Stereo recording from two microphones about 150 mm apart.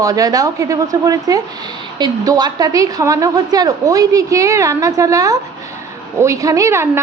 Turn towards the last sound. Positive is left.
turn(degrees=-15)  # may be behind; listen again after turning